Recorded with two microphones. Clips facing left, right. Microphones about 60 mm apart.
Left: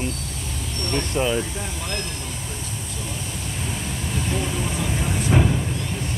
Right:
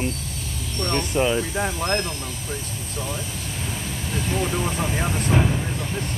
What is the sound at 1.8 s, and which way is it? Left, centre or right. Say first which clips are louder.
Speech: right 6 dB; right.